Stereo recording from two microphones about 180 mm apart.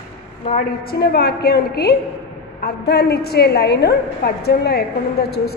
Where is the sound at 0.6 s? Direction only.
65° left (ahead or behind).